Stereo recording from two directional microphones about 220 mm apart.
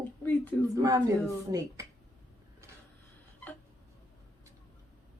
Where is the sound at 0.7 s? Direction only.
15° right (ahead or behind).